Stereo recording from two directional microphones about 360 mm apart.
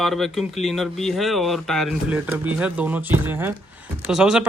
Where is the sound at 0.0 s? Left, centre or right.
Centre.